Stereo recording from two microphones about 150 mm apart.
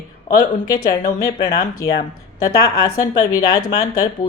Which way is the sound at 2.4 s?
85° left.